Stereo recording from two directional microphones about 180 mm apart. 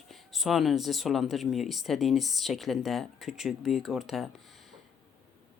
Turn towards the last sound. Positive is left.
turn(degrees=0)  # may be behind; listen again after turning